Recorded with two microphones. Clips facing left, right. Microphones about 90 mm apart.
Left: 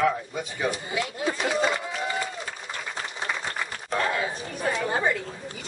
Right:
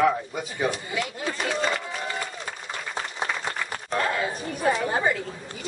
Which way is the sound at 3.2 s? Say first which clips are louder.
Even; centre (ahead or behind).